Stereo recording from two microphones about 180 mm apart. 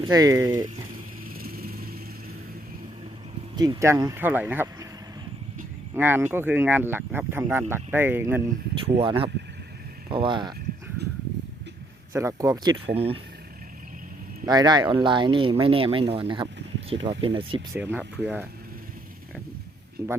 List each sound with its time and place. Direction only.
0.0 s speech: 20° right (ahead or behind)
1.4 s vehicle: 55° right (ahead or behind)
3.5 s speech: 25° right (ahead or behind)
5.9 s speech: 10° right (ahead or behind)
8.8 s speech: 30° right (ahead or behind)
12.1 s speech: 20° right (ahead or behind)
14.4 s speech: 20° right (ahead or behind)
17.7 s speech: 10° right (ahead or behind)